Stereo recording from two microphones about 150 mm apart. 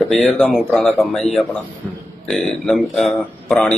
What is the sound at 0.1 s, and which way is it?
Speech, 5° left (ahead or behind).